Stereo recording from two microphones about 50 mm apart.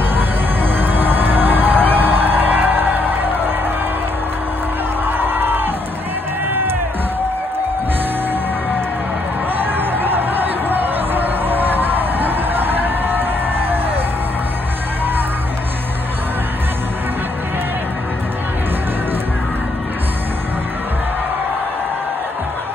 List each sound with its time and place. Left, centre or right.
0.1 s music: right
5.0 s music: right
9.6 s music: right